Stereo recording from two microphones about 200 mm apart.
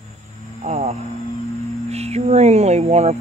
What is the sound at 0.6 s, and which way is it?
Speech, 35° right (ahead or behind).